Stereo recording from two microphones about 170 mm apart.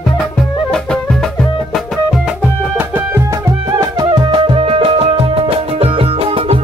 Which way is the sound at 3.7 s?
25° right (ahead or behind).